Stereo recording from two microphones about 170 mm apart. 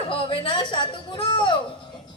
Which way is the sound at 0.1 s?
30° left (ahead or behind).